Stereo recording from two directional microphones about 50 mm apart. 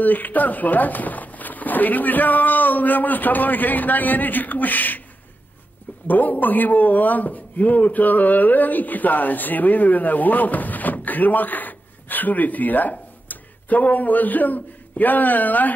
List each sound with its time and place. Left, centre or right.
0.0 s speech: left
6.0 s a man's voice: left